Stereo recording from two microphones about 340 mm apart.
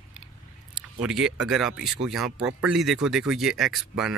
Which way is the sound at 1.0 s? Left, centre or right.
Centre.